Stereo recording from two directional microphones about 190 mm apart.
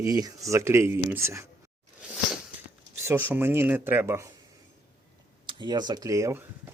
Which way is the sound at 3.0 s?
10° right (ahead or behind).